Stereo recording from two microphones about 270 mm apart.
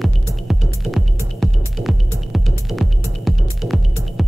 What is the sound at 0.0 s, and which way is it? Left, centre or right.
Music, centre.